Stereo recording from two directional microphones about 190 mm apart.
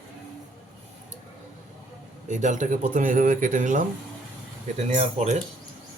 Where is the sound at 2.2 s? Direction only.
40° right (ahead or behind).